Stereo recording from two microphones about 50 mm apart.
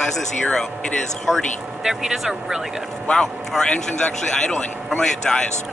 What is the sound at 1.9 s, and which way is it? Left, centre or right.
Speech, centre.